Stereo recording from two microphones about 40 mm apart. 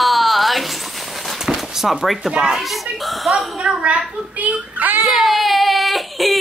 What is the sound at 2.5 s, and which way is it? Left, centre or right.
Speech, centre.